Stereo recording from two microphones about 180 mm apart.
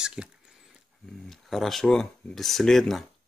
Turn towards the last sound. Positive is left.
turn(degrees=0)  # may be behind; listen again after turning